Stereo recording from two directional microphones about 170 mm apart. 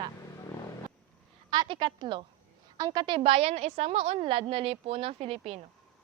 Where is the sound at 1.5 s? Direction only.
25° right (ahead or behind).